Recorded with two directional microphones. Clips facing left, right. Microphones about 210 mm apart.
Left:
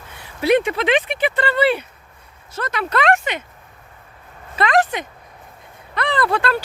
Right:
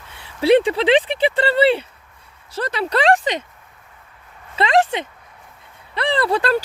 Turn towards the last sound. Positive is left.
turn(degrees=-35)  # may be behind; listen again after turning